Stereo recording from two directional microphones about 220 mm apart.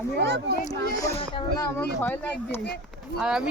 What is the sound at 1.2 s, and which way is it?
Speech, 25° left (ahead or behind).